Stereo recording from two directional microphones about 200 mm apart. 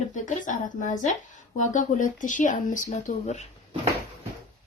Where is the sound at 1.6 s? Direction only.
40° left (ahead or behind).